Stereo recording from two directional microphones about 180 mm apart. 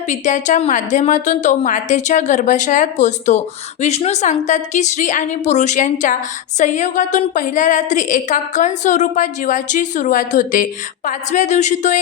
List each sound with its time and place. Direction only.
0.1 s a woman's voice: 40° left (ahead or behind)